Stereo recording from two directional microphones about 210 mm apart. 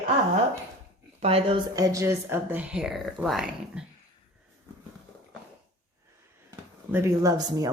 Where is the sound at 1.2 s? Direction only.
30° right (ahead or behind).